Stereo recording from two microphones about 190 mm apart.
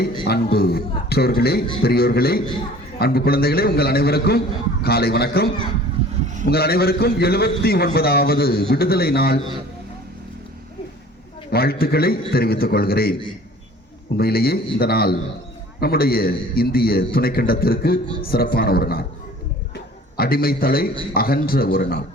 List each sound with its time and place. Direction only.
0.3 s a man's voice: 55° left (ahead or behind)
11.5 s a man's voice: 55° left (ahead or behind)
14.2 s a man's voice: 55° left (ahead or behind)
19.7 s a sound: 55° left (ahead or behind)
21.1 s a man's voice: 50° left (ahead or behind)